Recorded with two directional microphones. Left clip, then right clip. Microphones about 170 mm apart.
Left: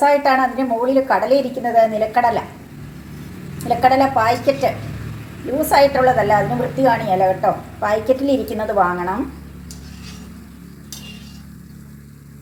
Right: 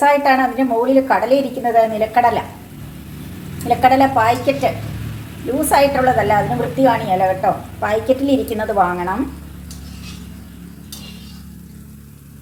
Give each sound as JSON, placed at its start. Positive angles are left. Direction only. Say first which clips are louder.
{"t": 0.0, "sound": "a woman's voice", "louder": "right 1 dB", "side_deg": -5}
{"t": 3.7, "sound": "a woman's voice", "louder": "right 2 dB", "side_deg": 0}